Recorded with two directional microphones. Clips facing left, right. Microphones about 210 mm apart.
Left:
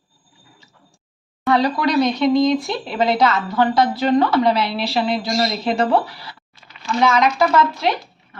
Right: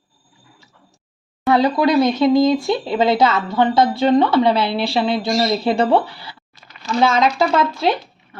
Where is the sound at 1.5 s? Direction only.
25° right (ahead or behind).